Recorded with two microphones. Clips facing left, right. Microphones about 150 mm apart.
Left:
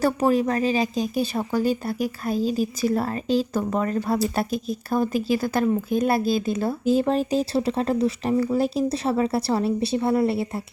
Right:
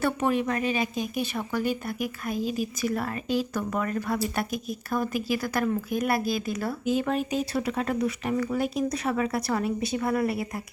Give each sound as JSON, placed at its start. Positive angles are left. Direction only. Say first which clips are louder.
{"t": 0.0, "sound": "a woman's voice", "louder": "left 5 dB", "side_deg": 35}